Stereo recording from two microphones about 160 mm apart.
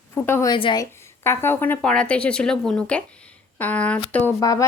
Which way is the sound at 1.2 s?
15° left (ahead or behind).